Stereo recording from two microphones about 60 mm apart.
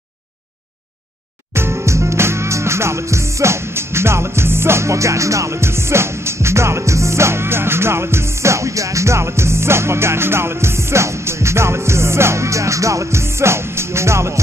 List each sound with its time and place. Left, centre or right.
1.5 s music: right